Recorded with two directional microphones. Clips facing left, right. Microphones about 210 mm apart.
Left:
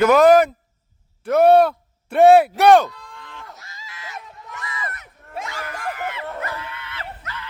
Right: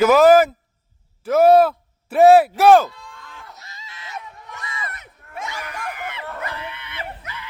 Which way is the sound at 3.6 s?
25° right (ahead or behind).